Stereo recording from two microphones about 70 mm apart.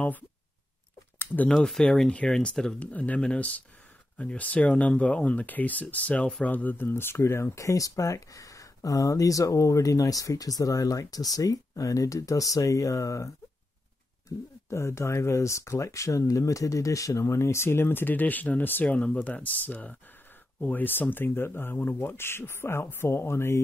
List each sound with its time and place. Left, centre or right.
1.1 s a sound: left
1.5 s speech: centre
2.8 s speech: left
14.7 s speech: left